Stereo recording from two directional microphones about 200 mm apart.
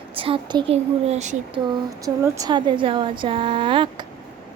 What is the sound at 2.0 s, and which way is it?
Speech, 15° right (ahead or behind).